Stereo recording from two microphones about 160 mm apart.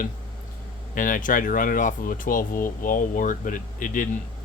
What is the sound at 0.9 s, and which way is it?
Speech, 55° left (ahead or behind).